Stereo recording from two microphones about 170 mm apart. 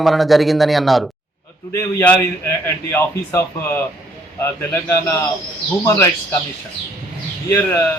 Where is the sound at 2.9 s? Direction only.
15° left (ahead or behind).